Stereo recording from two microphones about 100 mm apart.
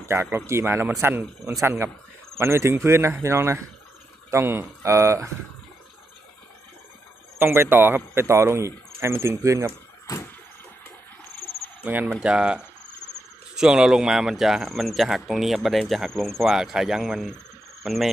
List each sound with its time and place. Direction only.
0.0 s speech: 25° right (ahead or behind)
7.3 s speech: 25° right (ahead or behind)
11.8 s speech: 15° right (ahead or behind); by 18.1 s centre (ahead or behind)